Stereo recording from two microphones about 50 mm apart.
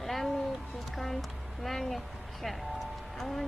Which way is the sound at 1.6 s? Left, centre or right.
Centre.